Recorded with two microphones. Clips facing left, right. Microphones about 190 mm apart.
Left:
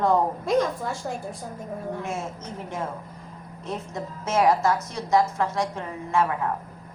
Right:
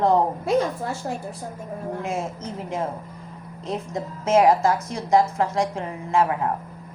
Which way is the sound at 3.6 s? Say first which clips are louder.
Right 3 dB; 15° right (ahead or behind).